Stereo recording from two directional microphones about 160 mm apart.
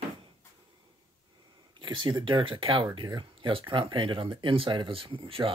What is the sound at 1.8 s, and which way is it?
Speech, 30° right (ahead or behind).